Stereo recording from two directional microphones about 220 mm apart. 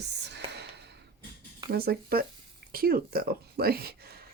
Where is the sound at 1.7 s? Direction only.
45° right (ahead or behind).